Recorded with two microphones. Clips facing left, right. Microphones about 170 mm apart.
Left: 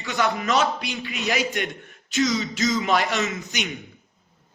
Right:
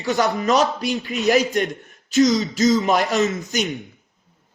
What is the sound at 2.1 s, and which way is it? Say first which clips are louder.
A man's voice: right 6 dB; 40° right (ahead or behind).